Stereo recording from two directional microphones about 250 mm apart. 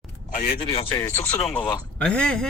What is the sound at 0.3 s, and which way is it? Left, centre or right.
A man's voice, left.